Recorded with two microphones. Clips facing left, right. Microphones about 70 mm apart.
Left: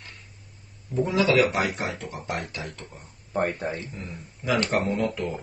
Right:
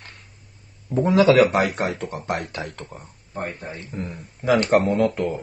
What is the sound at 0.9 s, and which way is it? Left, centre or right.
Speech, right.